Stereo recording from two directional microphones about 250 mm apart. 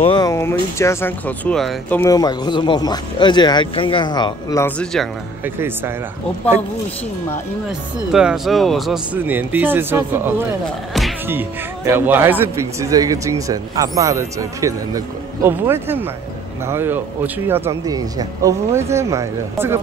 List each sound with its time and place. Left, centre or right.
0.0 s speech: centre
8.1 s speech: centre